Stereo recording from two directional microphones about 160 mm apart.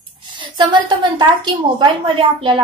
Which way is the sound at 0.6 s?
30° right (ahead or behind).